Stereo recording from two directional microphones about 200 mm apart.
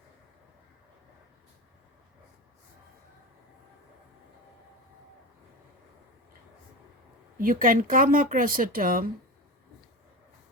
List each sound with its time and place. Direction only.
7.3 s speech: 45° right (ahead or behind)